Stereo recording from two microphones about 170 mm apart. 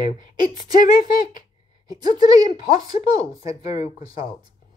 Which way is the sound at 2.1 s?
25° right (ahead or behind).